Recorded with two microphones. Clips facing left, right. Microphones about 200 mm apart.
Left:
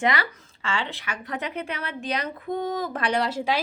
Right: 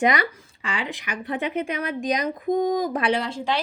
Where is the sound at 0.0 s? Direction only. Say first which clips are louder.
Right 3 dB; 15° right (ahead or behind).